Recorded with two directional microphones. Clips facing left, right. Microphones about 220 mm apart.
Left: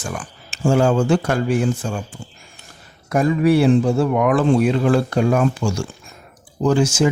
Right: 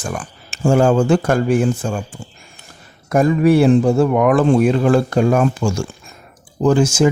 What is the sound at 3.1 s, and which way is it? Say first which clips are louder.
Speech: right 3 dB; 45° right (ahead or behind).